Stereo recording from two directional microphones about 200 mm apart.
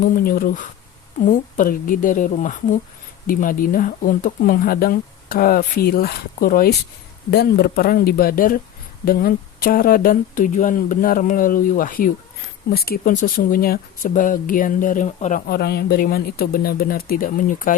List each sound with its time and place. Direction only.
0.0 s speech: 45° left (ahead or behind)